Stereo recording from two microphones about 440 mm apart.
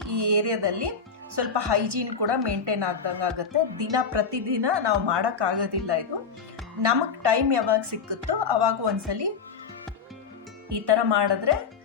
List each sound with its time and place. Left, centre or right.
0.1 s a woman's voice: right
10.7 s a woman's voice: right